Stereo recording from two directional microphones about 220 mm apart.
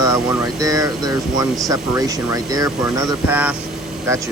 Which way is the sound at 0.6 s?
15° right (ahead or behind).